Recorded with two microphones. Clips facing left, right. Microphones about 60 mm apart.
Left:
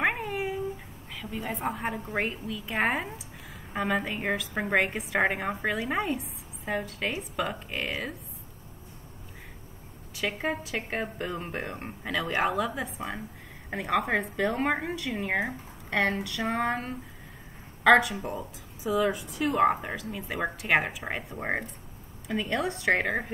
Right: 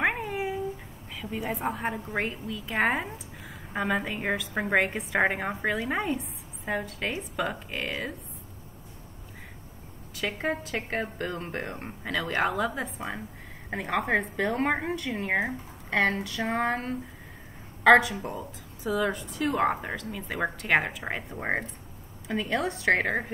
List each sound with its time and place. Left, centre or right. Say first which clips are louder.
0.0 s cat: even; centre
1.1 s a woman's voice: right 2 dB; centre
10.1 s a woman's voice: even; centre
10.9 s a woman's voice: right 1 dB; centre
11.6 s a woman's voice: even; centre
18.2 s a woman's voice: left 1 dB; centre